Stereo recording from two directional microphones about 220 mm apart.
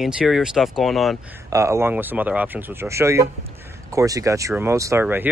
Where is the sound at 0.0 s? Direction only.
Centre (ahead or behind).